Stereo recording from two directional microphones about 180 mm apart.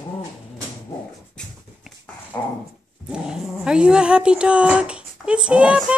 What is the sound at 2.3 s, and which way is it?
Dog, 15° left (ahead or behind).